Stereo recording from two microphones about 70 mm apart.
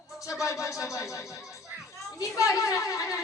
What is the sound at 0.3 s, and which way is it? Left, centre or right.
A woman's voice, left.